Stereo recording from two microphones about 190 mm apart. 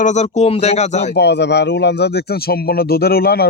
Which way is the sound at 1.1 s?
60° left (ahead or behind).